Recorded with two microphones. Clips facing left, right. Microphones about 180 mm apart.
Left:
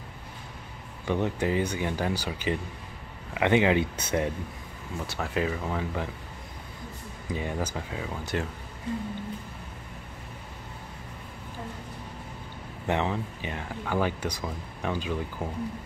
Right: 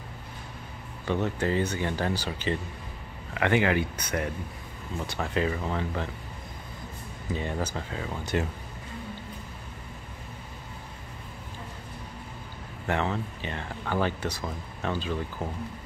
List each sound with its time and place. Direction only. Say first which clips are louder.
1.0 s speech: even; 15° left (ahead or behind)
5.0 s speech: right 1 dB; 5° left (ahead or behind)
7.3 s speech: even; 10° left (ahead or behind)
8.1 s speech: right 3 dB; 5° right (ahead or behind)
12.8 s speech: left 1 dB; 15° left (ahead or behind)